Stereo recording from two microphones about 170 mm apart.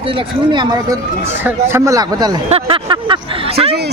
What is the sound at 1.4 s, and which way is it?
Speech, 15° right (ahead or behind).